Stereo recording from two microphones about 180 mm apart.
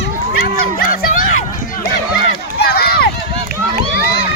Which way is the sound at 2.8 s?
60° left (ahead or behind).